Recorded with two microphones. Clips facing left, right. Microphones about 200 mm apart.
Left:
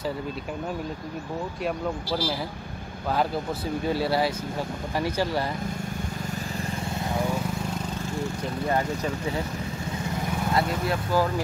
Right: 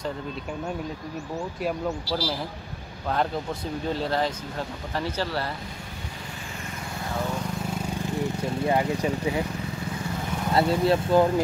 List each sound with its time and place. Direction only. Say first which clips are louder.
1.6 s speech: right 1 dB; centre (ahead or behind)
3.9 s speech: left 2 dB; 10° left (ahead or behind)
8.2 s speech: right 3 dB; 15° right (ahead or behind)
10.5 s speech: right 6 dB; 30° right (ahead or behind)